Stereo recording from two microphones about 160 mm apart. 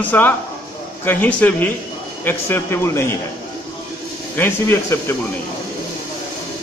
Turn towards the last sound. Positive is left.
turn(degrees=15)  # may be behind; listen again after turning